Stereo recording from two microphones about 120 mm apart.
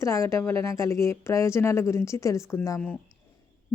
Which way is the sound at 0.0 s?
25° left (ahead or behind).